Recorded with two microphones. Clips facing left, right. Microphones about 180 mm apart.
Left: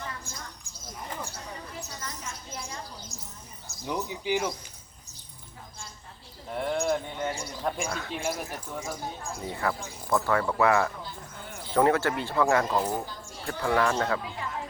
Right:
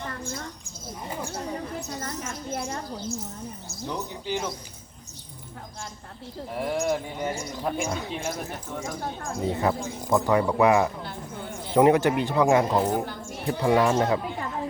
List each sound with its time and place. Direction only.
2.0 s a woman's voice: 55° right (ahead or behind)
3.8 s speech: 10° left (ahead or behind)
6.5 s speech: 5° right (ahead or behind)
7.9 s speech: 20° right (ahead or behind)
8.1 s speech: 5° left (ahead or behind)
9.4 s speech: 20° right (ahead or behind)